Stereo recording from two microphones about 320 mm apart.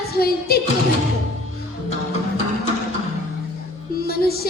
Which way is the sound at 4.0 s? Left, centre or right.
Left.